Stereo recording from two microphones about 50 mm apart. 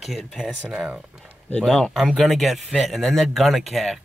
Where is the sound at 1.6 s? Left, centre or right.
Centre.